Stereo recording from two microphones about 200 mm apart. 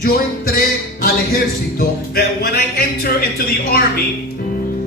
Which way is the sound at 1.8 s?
50° left (ahead or behind).